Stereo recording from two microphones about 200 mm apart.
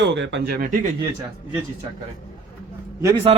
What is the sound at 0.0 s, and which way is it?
Speech, 65° right (ahead or behind).